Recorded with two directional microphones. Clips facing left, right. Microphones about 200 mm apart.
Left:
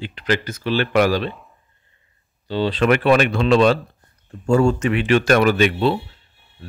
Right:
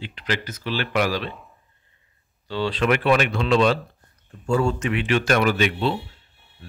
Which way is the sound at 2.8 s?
50° left (ahead or behind).